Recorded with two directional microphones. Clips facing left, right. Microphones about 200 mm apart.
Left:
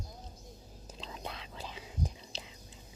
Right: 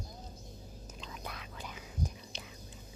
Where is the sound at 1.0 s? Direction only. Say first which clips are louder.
Left 3 dB; 30° left (ahead or behind).